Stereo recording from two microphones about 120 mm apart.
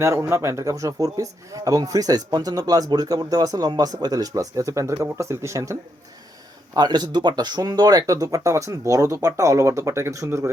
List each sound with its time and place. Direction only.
0.0 s a man's voice: 20° right (ahead or behind)
6.7 s speech: 35° right (ahead or behind)